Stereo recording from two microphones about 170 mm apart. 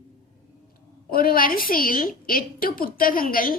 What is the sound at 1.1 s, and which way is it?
A woman's voice, 60° left (ahead or behind).